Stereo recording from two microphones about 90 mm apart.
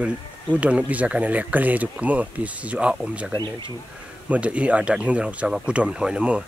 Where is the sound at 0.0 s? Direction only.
15° right (ahead or behind).